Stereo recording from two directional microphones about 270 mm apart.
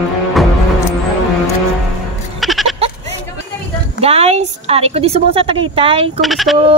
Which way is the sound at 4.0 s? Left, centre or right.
Right.